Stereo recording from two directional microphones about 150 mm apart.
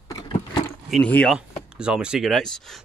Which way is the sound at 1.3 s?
5° right (ahead or behind).